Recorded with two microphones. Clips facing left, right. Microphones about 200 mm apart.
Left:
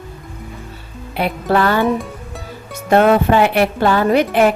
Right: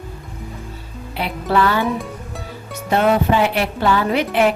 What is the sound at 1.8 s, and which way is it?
Speech, centre (ahead or behind).